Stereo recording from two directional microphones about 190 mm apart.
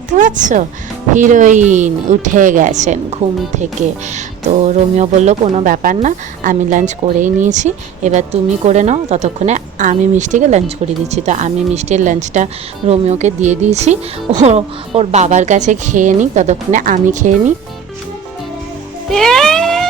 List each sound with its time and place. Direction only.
0.1 s speech: 40° right (ahead or behind)
19.0 s music: centre (ahead or behind)